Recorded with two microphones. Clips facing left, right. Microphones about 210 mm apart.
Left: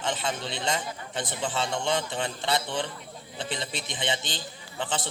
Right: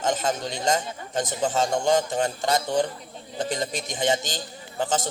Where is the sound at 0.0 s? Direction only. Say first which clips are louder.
Right 5 dB; 45° right (ahead or behind).